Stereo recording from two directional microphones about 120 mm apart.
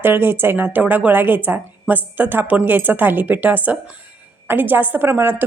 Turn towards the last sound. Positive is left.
turn(degrees=-20)  # may be behind; listen again after turning